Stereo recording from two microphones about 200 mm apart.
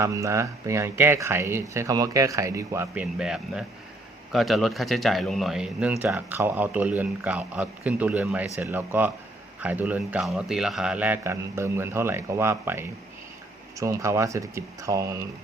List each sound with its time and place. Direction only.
0.0 s speech: 15° right (ahead or behind)